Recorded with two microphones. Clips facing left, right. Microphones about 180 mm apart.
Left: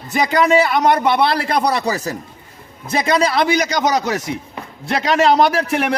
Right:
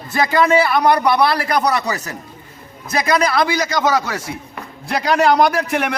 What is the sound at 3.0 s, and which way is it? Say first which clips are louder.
A man's voice: left 1 dB; 25° left (ahead or behind).